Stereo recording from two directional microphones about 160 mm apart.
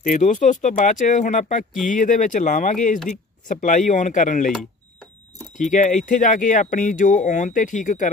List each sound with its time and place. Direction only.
0.0 s speech: 50° left (ahead or behind)
5.7 s speech: 50° left (ahead or behind)